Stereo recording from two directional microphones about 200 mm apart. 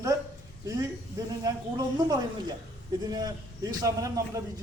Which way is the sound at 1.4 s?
20° right (ahead or behind).